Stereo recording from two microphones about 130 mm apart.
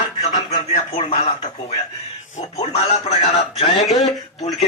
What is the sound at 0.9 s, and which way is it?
Speech, 50° left (ahead or behind).